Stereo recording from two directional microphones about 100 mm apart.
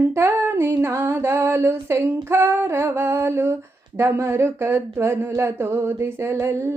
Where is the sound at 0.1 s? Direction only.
25° right (ahead or behind).